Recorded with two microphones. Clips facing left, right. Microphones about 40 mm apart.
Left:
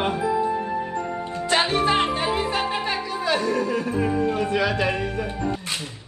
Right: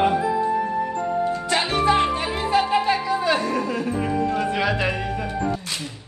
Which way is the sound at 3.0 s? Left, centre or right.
Right.